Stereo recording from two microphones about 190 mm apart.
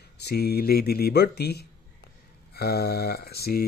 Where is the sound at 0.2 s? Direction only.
55° left (ahead or behind).